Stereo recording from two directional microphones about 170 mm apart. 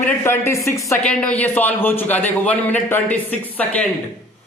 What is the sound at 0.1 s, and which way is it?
Speech, 15° left (ahead or behind).